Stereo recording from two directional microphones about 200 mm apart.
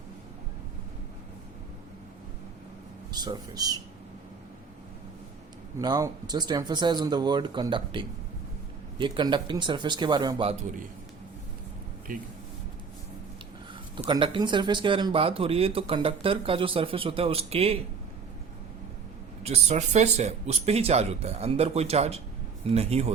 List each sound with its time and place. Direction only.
3.1 s speech: 20° right (ahead or behind)
5.8 s speech: 20° right (ahead or behind)
12.1 s speech: 45° right (ahead or behind)
13.9 s speech: 25° right (ahead or behind)
19.4 s speech: 30° right (ahead or behind)